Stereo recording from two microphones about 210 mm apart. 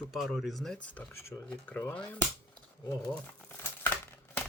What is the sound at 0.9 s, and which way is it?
Speech, 10° left (ahead or behind).